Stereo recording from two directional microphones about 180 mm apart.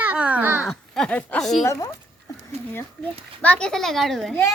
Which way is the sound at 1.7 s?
20° left (ahead or behind).